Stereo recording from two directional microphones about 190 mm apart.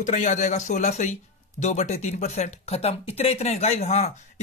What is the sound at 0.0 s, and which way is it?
Speech, 40° left (ahead or behind).